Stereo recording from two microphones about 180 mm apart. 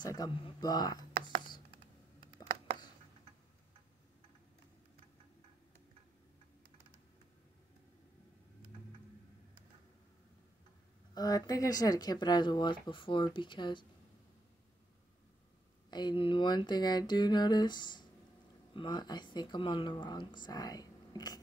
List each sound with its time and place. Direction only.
0.0 s speech: 20° left (ahead or behind)
11.1 s speech: 20° left (ahead or behind)
15.9 s speech: 25° left (ahead or behind)